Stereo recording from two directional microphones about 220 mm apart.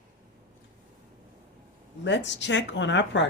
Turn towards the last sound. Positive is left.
turn(degrees=55)  # may be behind; listen again after turning